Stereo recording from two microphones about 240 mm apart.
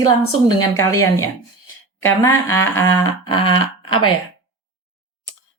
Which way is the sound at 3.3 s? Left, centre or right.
Centre.